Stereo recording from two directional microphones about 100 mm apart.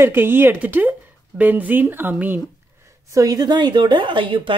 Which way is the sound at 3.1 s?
35° right (ahead or behind).